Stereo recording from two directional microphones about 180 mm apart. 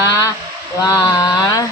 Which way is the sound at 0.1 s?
20° left (ahead or behind).